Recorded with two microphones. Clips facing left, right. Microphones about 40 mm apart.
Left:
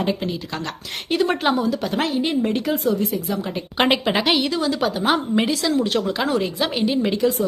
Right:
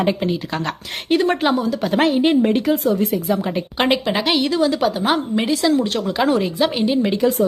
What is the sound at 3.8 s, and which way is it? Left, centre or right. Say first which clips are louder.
A woman's voice: even; centre.